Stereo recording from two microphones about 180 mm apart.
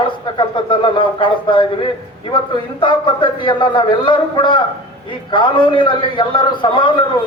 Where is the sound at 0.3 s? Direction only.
30° left (ahead or behind).